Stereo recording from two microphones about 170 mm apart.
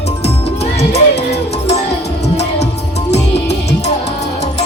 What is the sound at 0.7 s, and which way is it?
Music, 40° left (ahead or behind).